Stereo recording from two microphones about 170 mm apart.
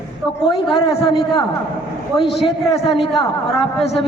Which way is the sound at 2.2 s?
Centre (ahead or behind).